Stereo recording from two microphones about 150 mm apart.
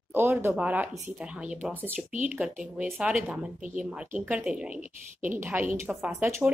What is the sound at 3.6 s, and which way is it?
Speech, 60° right (ahead or behind).